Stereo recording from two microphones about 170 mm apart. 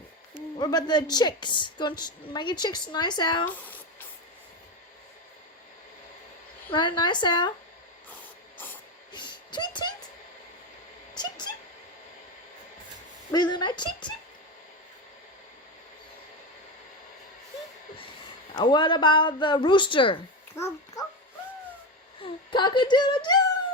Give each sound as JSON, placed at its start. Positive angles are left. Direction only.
{"t": 0.6, "sound": "a woman's voice", "side_deg": 25}
{"t": 6.7, "sound": "a woman's voice", "side_deg": 25}
{"t": 8.5, "sound": "spray", "side_deg": 10}
{"t": 9.1, "sound": "a sound", "side_deg": 25}
{"t": 13.3, "sound": "a woman's voice", "side_deg": 25}
{"t": 18.5, "sound": "a woman's voice", "side_deg": 25}
{"t": 20.6, "sound": "speech", "side_deg": 15}
{"t": 22.2, "sound": "speech", "side_deg": 25}